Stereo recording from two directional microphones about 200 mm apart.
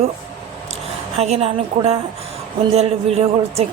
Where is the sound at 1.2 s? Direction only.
30° right (ahead or behind).